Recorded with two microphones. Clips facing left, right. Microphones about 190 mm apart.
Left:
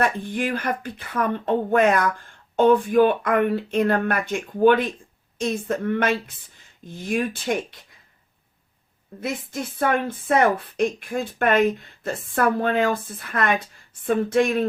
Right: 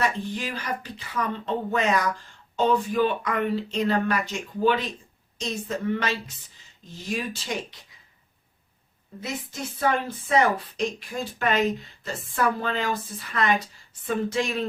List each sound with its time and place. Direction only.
0.0 s a woman's voice: 55° left (ahead or behind)
9.2 s speech: 55° left (ahead or behind)